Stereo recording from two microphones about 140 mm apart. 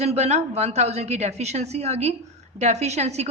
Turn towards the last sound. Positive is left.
turn(degrees=-50)  # may be behind; listen again after turning